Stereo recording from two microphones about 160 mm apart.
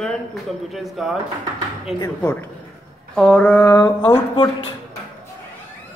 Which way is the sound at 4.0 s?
30° left (ahead or behind).